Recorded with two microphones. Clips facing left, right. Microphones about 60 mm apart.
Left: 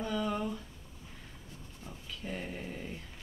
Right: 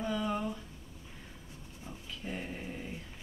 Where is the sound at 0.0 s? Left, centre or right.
Centre.